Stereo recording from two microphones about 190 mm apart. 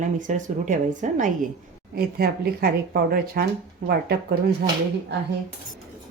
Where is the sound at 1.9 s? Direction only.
55° right (ahead or behind).